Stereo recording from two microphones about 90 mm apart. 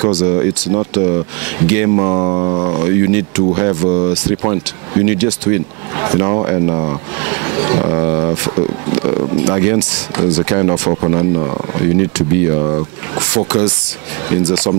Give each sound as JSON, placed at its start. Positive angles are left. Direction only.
{"t": 0.0, "sound": "speech", "side_deg": -10}
{"t": 2.0, "sound": "a sound", "side_deg": -30}
{"t": 2.8, "sound": "speech", "side_deg": -15}
{"t": 10.5, "sound": "speech", "side_deg": -25}
{"t": 13.4, "sound": "speech", "side_deg": -15}